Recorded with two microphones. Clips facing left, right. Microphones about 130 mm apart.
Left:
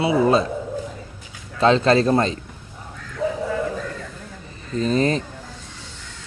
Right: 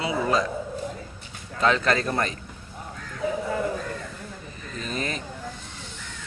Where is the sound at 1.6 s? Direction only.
25° left (ahead or behind).